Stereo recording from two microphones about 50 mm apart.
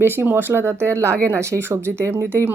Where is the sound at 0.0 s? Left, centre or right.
Right.